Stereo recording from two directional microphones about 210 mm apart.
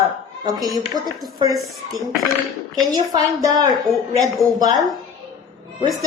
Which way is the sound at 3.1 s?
20° right (ahead or behind).